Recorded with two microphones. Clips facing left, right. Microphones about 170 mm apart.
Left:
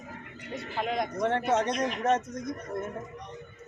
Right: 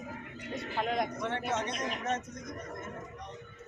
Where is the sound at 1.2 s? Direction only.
50° left (ahead or behind).